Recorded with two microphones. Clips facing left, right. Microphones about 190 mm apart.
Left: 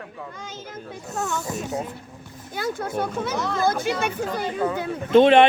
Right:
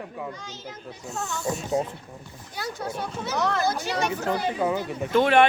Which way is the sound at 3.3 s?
65° right (ahead or behind).